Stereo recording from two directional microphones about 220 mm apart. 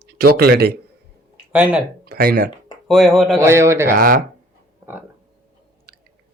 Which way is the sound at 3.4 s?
10° right (ahead or behind).